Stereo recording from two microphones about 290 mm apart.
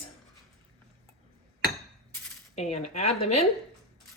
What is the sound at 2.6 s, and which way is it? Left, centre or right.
Speech, left.